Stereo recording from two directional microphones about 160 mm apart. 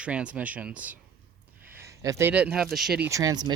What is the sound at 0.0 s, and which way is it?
Speech, 5° right (ahead or behind).